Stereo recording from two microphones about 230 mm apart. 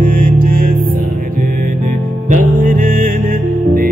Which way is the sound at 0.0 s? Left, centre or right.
Right.